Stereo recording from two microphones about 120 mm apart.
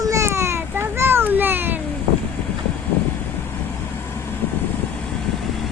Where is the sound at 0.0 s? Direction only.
25° right (ahead or behind).